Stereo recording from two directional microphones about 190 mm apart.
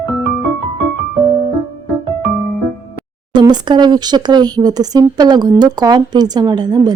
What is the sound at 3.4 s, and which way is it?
Speech, 20° right (ahead or behind).